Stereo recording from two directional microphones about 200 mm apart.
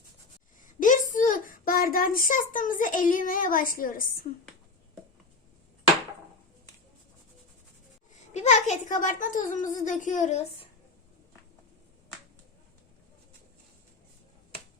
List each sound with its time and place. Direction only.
0.8 s a child's voice: 40° left (ahead or behind)
8.1 s a child's voice: 35° left (ahead or behind)